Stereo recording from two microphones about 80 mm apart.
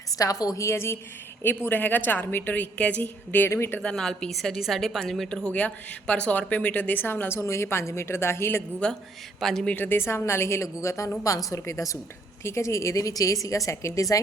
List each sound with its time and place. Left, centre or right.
0.1 s a woman's voice: left
3.8 s a woman's voice: centre; by 8.6 s left
8.8 s a woman's voice: centre
9.7 s a woman's voice: left